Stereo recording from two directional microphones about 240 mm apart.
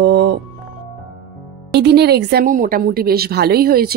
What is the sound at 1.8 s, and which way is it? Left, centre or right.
A woman's voice, right.